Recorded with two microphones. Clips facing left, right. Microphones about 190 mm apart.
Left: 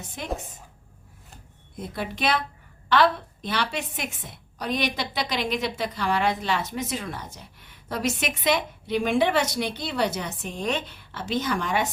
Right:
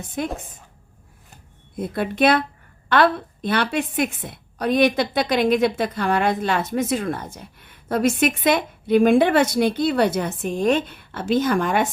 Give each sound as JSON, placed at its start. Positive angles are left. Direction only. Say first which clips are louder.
{"t": 1.8, "sound": "a woman's voice", "louder": "right 9 dB", "side_deg": -55}